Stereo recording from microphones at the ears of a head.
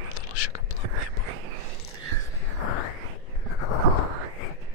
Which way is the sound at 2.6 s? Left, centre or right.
Left.